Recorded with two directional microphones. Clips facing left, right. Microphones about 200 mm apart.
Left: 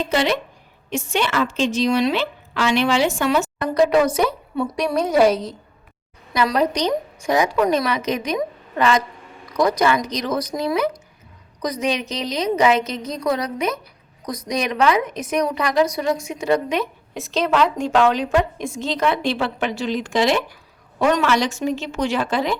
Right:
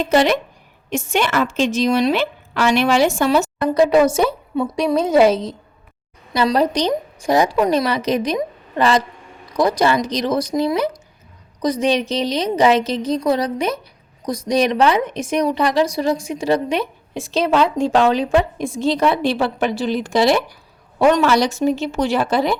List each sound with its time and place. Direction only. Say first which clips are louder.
0.1 s a woman's voice: right 7 dB; 45° right (ahead or behind)